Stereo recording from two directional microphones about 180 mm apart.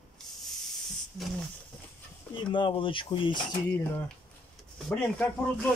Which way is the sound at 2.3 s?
25° left (ahead or behind).